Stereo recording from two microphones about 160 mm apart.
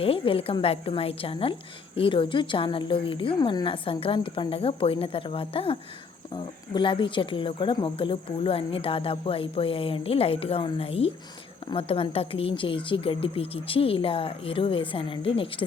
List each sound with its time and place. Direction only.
0.0 s speech: 35° left (ahead or behind)